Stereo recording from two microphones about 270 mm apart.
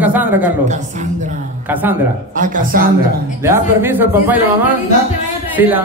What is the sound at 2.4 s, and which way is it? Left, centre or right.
Speech, right.